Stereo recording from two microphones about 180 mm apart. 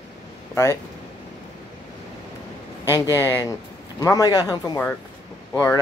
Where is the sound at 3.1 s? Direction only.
15° right (ahead or behind).